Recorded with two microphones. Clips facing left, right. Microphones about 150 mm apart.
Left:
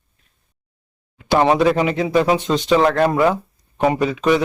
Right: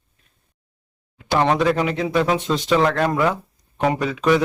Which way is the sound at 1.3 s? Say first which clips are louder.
Left 3 dB; 10° left (ahead or behind).